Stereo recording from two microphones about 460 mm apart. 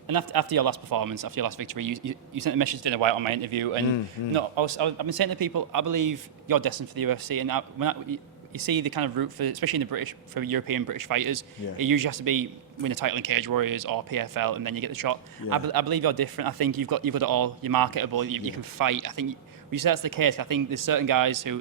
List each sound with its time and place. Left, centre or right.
0.1 s a man's voice: right
2.8 s speech: right
4.4 s a man's voice: right